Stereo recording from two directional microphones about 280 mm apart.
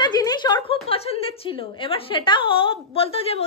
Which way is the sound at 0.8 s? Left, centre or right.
Left.